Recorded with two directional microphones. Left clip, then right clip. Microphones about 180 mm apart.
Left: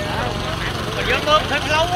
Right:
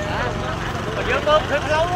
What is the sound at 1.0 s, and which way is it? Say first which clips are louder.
Vehicle: left 1 dB; 60° right (ahead or behind).